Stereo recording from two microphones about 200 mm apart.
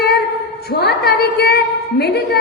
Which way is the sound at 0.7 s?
50° left (ahead or behind).